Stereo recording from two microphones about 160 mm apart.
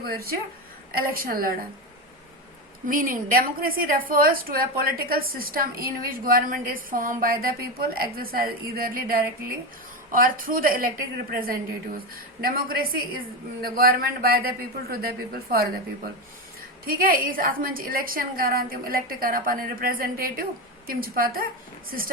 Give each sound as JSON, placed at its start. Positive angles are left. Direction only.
{"t": 0.0, "sound": "a woman's voice", "side_deg": -70}
{"t": 2.8, "sound": "a woman's voice", "side_deg": -60}
{"t": 16.8, "sound": "a woman's voice", "side_deg": -65}